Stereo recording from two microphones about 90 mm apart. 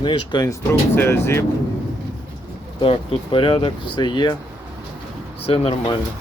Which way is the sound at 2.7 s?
70° left (ahead or behind).